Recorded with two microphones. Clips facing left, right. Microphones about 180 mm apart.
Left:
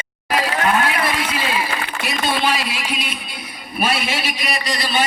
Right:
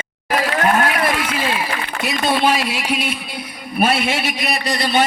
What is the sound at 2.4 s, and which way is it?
A man's voice, 60° right (ahead or behind).